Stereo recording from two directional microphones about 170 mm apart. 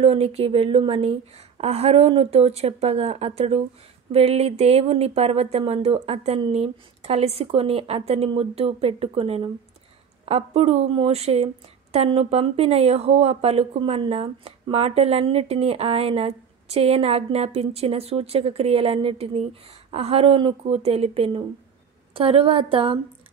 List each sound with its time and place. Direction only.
0.0 s a woman's voice: 35° right (ahead or behind)